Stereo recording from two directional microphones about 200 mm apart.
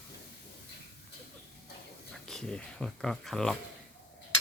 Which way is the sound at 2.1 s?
Centre (ahead or behind).